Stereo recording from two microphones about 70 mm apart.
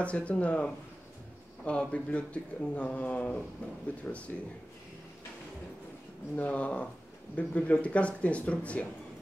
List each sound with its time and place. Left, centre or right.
0.0 s speech: centre
6.3 s speech: left